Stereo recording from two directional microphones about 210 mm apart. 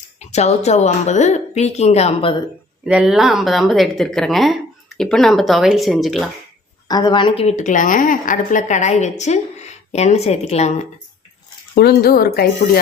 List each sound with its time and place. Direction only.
0.2 s a woman's voice: 30° left (ahead or behind)
2.8 s speech: 5° right (ahead or behind)
6.8 s a woman's voice: 20° left (ahead or behind)
11.7 s speech: 50° left (ahead or behind)